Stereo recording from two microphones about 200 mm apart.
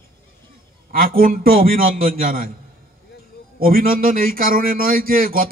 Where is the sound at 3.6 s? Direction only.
45° right (ahead or behind).